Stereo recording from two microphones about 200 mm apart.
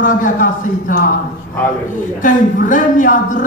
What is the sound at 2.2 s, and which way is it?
Speech, 40° left (ahead or behind).